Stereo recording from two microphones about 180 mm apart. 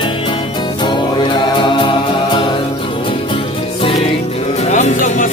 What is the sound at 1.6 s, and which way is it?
Music, 25° left (ahead or behind).